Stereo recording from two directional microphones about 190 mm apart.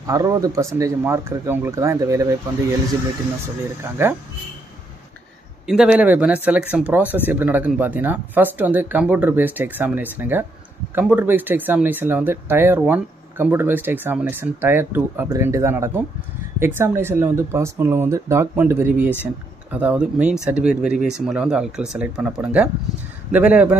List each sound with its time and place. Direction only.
0.0 s speech: 15° right (ahead or behind)
4.0 s speech: 10° right (ahead or behind)
5.7 s speech: 5° right (ahead or behind)